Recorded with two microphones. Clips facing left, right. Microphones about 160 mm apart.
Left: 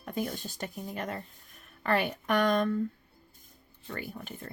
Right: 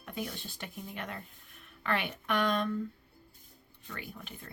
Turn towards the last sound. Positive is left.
turn(degrees=40)  # may be behind; listen again after turning